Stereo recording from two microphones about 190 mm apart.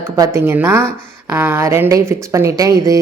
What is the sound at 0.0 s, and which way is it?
Speech, 15° right (ahead or behind).